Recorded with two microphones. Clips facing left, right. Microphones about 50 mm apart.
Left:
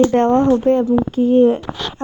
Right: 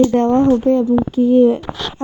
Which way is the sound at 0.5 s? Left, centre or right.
Left.